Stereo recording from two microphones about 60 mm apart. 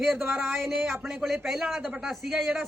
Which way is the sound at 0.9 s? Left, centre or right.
Centre.